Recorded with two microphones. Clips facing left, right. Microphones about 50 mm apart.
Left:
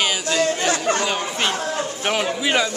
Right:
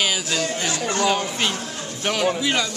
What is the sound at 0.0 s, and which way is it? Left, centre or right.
Chatter, centre.